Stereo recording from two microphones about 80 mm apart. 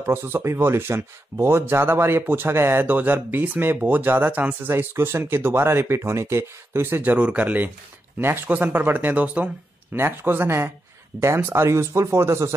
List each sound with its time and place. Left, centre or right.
0.0 s a man's voice: right
9.9 s a man's voice: right